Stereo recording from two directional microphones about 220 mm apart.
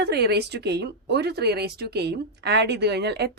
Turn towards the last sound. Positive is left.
turn(degrees=-50)  # may be behind; listen again after turning